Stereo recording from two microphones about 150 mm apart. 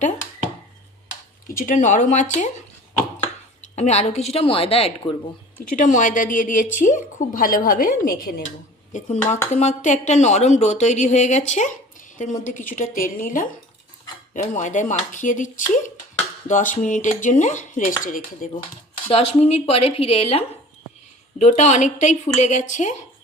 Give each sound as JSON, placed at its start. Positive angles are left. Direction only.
{"t": 1.5, "sound": "a woman's voice", "side_deg": 60}
{"t": 3.6, "sound": "a woman's voice", "side_deg": 50}
{"t": 5.7, "sound": "a woman's voice", "side_deg": 55}
{"t": 19.1, "sound": "speech", "side_deg": 45}
{"t": 21.3, "sound": "a woman's voice", "side_deg": 50}